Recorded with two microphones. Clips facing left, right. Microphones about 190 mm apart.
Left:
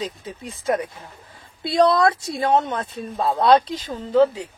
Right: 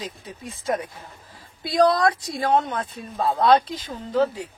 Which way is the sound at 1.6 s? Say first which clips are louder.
Left 2 dB; 25° left (ahead or behind).